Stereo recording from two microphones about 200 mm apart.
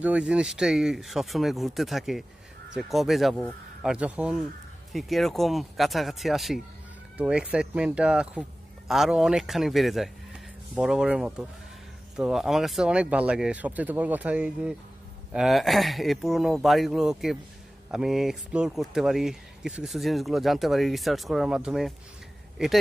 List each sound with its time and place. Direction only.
0.0 s speech: 5° right (ahead or behind)